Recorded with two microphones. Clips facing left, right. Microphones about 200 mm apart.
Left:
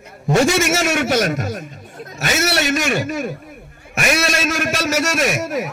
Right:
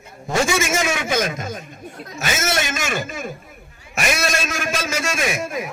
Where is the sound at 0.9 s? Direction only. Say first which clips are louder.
Left 4 dB; 70° left (ahead or behind).